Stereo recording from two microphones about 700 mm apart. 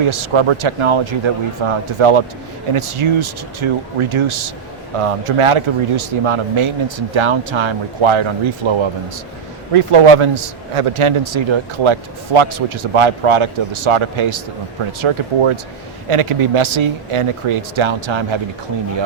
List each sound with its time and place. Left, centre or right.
0.0 s a man's voice: right